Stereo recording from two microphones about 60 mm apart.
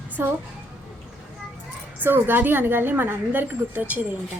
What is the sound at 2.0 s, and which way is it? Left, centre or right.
A woman's voice, right.